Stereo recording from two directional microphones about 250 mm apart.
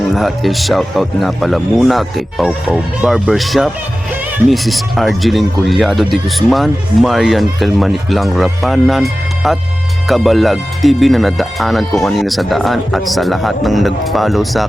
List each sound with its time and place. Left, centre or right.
0.1 s speech: centre